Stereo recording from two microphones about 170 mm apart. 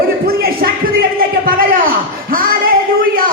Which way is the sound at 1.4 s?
60° right (ahead or behind).